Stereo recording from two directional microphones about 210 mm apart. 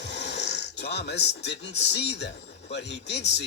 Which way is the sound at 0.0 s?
55° left (ahead or behind).